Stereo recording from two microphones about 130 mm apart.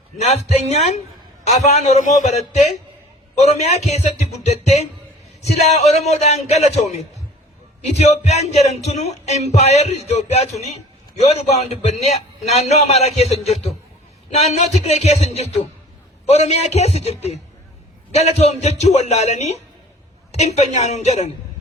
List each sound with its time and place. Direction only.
0.2 s speech: 55° left (ahead or behind)